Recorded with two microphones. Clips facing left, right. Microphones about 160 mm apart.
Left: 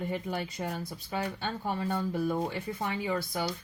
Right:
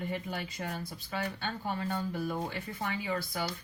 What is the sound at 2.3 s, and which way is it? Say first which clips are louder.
Speech: left 4 dB; 25° left (ahead or behind).